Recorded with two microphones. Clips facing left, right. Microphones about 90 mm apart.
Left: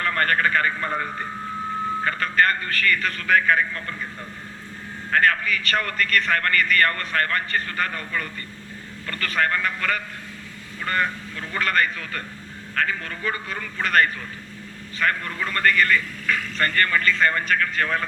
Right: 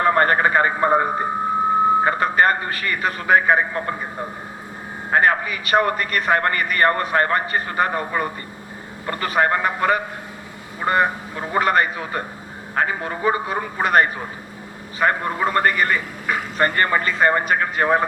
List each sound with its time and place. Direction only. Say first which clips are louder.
0.0 s a man's voice: right 6 dB; 25° right (ahead or behind)
9.0 s a man's voice: right 5 dB; 20° right (ahead or behind)